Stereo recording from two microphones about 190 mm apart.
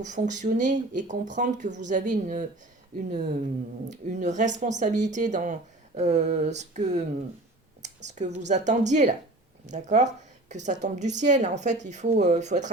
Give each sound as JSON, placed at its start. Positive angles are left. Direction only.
{"t": 0.0, "sound": "speech", "side_deg": -40}
{"t": 7.8, "sound": "a sound", "side_deg": -40}
{"t": 8.4, "sound": "speech", "side_deg": -40}